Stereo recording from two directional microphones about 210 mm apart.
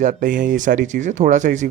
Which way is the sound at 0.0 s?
40° right (ahead or behind).